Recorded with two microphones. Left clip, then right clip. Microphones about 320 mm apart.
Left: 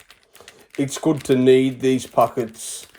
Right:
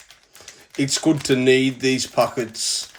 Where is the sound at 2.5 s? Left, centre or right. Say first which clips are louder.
Right 11 dB; centre.